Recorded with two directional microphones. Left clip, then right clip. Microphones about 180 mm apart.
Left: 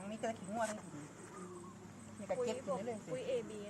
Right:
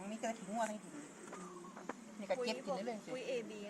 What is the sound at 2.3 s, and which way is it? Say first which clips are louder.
Speech: left 1 dB; centre (ahead or behind).